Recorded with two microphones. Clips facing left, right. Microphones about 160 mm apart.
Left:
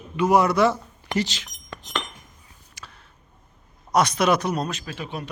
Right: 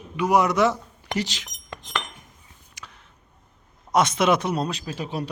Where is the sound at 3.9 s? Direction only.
25° right (ahead or behind).